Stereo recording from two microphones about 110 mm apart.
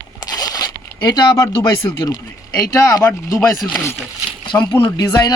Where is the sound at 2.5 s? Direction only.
30° left (ahead or behind).